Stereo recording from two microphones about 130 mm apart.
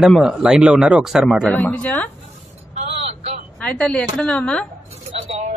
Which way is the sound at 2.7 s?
50° right (ahead or behind).